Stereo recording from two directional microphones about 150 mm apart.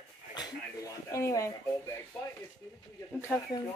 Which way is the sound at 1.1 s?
20° left (ahead or behind).